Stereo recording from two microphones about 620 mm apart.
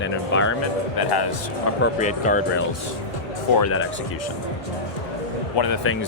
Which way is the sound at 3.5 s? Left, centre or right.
Left.